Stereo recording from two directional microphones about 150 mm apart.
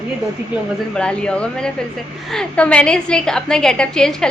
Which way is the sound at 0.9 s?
5° left (ahead or behind).